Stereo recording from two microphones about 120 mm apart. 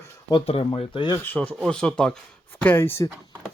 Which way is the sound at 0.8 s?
45° left (ahead or behind).